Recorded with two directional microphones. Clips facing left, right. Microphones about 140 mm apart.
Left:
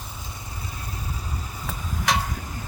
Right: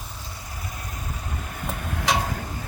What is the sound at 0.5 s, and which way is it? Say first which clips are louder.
Vehicle: right 1 dB; 30° left (ahead or behind).